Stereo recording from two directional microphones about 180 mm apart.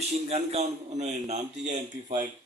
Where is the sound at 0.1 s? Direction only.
35° right (ahead or behind).